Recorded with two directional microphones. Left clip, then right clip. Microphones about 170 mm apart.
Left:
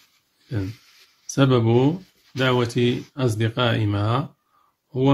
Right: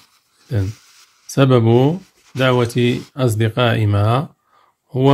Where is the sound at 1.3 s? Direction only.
30° right (ahead or behind).